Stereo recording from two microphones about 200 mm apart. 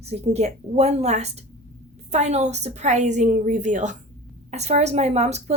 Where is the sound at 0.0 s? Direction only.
30° right (ahead or behind).